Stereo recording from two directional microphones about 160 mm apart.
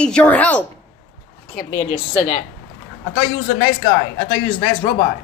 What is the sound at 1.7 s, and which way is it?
Speech, 30° left (ahead or behind).